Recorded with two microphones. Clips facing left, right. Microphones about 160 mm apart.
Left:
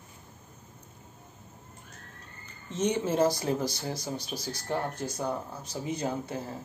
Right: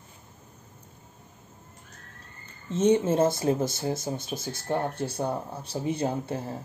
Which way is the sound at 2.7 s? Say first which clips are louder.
Right 6 dB; 25° right (ahead or behind).